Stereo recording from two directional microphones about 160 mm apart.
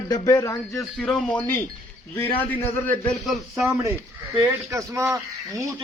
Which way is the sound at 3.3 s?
Centre (ahead or behind).